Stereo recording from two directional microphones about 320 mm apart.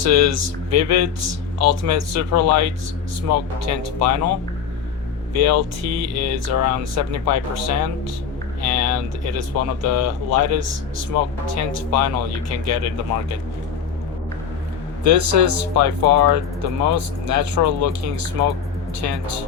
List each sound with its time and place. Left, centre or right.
0.0 s speech: right
5.3 s speech: right
15.0 s speech: right